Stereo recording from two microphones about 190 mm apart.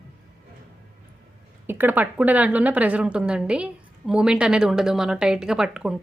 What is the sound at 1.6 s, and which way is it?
A woman's voice, 10° right (ahead or behind).